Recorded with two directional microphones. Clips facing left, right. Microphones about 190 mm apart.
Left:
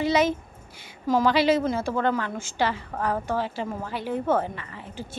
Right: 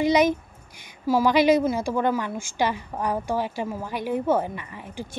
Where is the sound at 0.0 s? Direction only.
15° right (ahead or behind).